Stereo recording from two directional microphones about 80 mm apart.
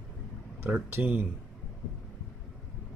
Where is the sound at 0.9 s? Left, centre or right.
Centre.